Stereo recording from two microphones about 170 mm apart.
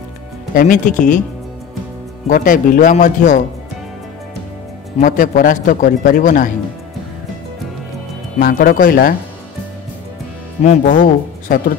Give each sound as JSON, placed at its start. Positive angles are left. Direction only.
{"t": 0.6, "sound": "a man's voice", "side_deg": 50}
{"t": 2.2, "sound": "a man's voice", "side_deg": 50}
{"t": 4.9, "sound": "a man's voice", "side_deg": 50}
{"t": 8.4, "sound": "speech", "side_deg": 60}
{"t": 10.6, "sound": "speech", "side_deg": 45}